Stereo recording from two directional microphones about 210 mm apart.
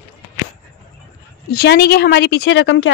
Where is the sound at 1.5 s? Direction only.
50° left (ahead or behind).